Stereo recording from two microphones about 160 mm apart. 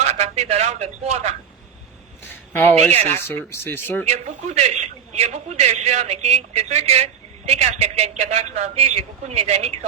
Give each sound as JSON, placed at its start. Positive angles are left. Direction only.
{"t": 0.0, "sound": "a man's voice", "side_deg": -45}
{"t": 2.5, "sound": "speech", "side_deg": 10}
{"t": 2.9, "sound": "speech", "side_deg": -40}
{"t": 3.2, "sound": "speech", "side_deg": 15}
{"t": 4.0, "sound": "a man's voice", "side_deg": -45}